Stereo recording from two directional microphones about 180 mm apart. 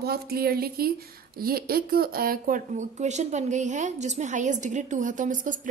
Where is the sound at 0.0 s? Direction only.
60° right (ahead or behind).